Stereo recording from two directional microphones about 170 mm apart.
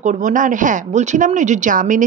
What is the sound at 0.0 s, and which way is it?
A woman's voice, 45° right (ahead or behind).